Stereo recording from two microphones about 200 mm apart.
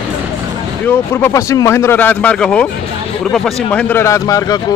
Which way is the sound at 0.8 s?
15° left (ahead or behind).